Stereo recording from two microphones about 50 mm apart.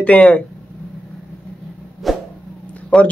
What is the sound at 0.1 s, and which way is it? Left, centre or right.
Speech, left.